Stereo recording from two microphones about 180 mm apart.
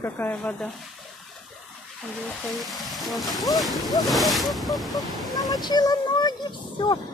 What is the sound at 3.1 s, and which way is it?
A woman's voice, centre (ahead or behind).